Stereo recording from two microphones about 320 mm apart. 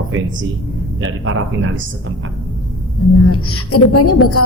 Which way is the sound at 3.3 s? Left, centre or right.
Left.